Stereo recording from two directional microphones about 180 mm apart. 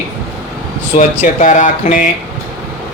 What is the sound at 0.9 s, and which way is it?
Speech, 45° left (ahead or behind).